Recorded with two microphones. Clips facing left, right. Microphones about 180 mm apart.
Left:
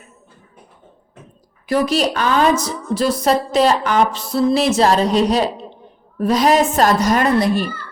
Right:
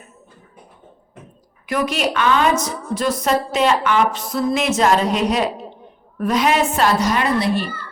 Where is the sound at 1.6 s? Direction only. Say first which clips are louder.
Left 4 dB; 35° left (ahead or behind).